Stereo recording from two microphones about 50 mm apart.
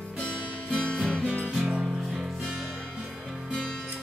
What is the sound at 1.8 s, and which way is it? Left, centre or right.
Music, centre.